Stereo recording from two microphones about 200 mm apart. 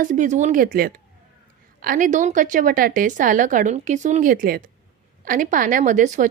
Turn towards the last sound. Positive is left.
turn(degrees=-40)  # may be behind; listen again after turning